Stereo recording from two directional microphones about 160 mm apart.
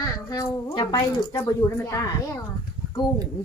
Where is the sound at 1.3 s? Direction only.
15° left (ahead or behind).